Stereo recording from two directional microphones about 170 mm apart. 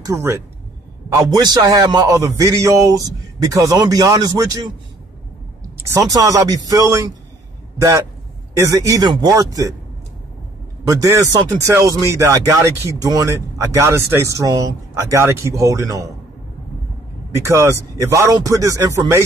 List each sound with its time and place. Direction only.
0.0 s speech: 15° right (ahead or behind)
5.9 s speech: 20° right (ahead or behind)
8.5 s speech: 20° right (ahead or behind)
10.9 s speech: 20° right (ahead or behind)
17.4 s speech: 15° right (ahead or behind)